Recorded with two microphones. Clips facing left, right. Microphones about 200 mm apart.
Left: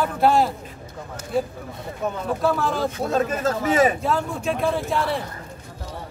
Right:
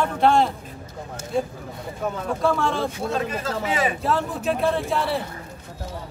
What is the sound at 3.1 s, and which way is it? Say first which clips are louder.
Speech: left 4 dB; 45° left (ahead or behind).